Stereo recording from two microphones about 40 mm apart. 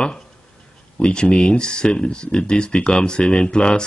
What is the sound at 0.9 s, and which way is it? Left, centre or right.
Speech, left.